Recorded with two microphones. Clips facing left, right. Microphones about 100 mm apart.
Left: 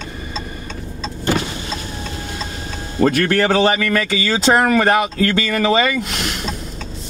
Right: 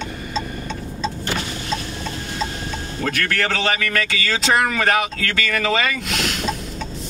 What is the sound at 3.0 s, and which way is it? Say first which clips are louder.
Speech: left 8 dB; 20° left (ahead or behind).